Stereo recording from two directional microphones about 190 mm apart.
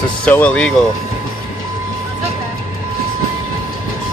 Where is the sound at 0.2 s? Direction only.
5° left (ahead or behind).